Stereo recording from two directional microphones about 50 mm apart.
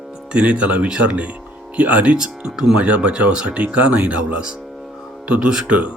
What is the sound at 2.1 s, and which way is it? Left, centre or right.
Speech, centre.